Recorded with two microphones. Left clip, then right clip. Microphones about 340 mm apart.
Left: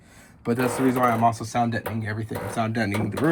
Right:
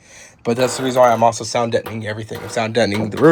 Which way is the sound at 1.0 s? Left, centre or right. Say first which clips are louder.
Right 10 dB; right.